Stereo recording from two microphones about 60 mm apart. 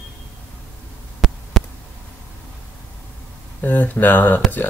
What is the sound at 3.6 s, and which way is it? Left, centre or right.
Speech, left.